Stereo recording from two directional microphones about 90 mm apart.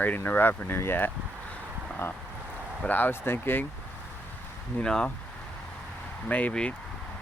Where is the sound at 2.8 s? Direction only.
20° left (ahead or behind).